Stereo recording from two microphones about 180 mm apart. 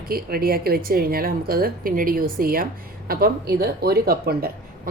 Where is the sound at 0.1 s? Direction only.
55° right (ahead or behind).